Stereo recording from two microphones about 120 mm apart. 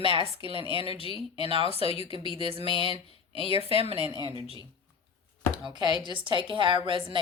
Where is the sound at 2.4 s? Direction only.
45° right (ahead or behind).